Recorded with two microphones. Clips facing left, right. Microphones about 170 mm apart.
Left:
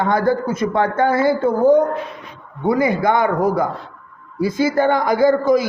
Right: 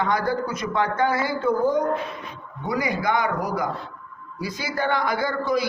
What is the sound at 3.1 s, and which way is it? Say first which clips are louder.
Speech: left 5 dB; 55° left (ahead or behind).